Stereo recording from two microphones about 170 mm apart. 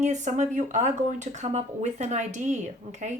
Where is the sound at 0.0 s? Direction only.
45° right (ahead or behind).